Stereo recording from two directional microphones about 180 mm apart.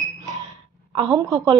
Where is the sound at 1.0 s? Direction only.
20° right (ahead or behind).